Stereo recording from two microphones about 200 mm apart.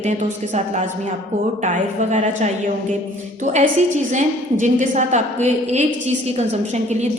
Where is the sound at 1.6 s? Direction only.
40° right (ahead or behind).